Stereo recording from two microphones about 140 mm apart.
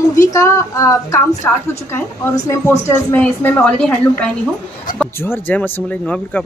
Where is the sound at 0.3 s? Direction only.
20° left (ahead or behind).